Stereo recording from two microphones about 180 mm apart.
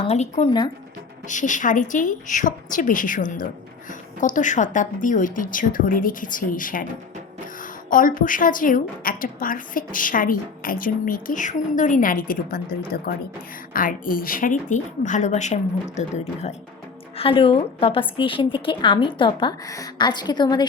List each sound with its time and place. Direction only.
0.0 s a woman's voice: 35° left (ahead or behind)
7.9 s a woman's voice: 50° left (ahead or behind); by 20.7 s 25° left (ahead or behind)